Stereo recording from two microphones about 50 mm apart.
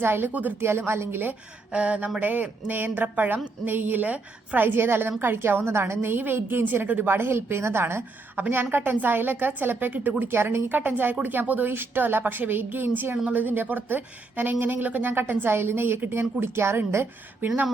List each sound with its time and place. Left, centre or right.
0.0 s a woman's voice: right
1.7 s a sound: right
2.2 s a woman's voice: right
10.2 s a woman's voice: right